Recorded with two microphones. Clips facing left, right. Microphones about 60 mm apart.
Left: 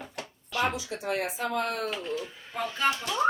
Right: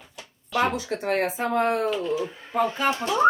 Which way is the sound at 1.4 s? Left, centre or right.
Right.